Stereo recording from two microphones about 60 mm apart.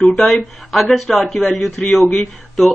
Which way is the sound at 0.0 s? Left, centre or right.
Centre.